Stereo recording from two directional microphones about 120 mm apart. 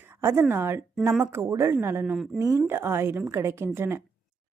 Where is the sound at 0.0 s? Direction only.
20° right (ahead or behind).